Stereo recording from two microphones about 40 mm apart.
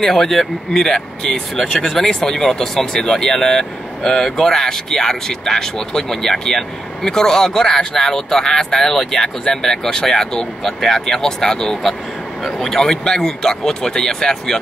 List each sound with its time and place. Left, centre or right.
0.0 s speech: centre